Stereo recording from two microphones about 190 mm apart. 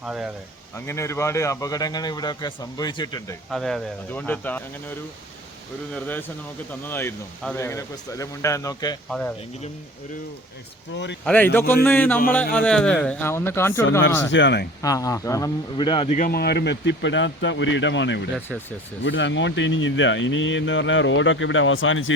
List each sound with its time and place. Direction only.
0.0 s speech: 5° right (ahead or behind)
0.9 s speech: 15° left (ahead or behind)
3.5 s speech: centre (ahead or behind); by 9.0 s 20° left (ahead or behind)
9.0 s speech: 5° left (ahead or behind)
10.9 s speech: 70° left (ahead or behind)
11.3 s speech: 10° left (ahead or behind)
14.3 s speech: 70° left (ahead or behind)
14.8 s speech: 15° left (ahead or behind)
16.1 s speech: 50° left (ahead or behind); by 22.1 s 90° left